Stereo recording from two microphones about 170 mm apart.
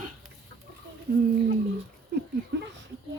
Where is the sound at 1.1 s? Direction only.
65° right (ahead or behind).